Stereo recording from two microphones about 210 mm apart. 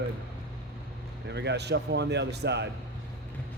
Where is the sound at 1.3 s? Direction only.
55° right (ahead or behind).